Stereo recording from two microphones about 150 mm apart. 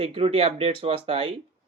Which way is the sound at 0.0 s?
40° right (ahead or behind).